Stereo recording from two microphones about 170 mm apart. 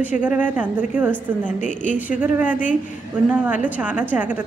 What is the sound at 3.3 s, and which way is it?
A woman's voice, 5° right (ahead or behind).